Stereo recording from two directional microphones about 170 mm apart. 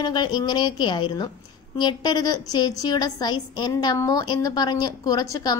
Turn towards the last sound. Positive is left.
turn(degrees=20)  # may be behind; listen again after turning